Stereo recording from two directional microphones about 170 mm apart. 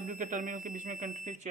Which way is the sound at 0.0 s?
50° right (ahead or behind).